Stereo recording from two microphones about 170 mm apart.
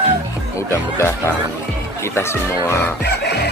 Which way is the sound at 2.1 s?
15° left (ahead or behind).